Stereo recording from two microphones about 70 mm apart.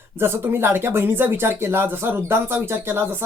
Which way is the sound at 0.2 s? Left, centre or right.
Right.